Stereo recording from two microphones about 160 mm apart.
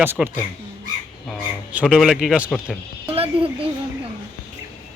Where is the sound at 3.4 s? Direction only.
35° right (ahead or behind).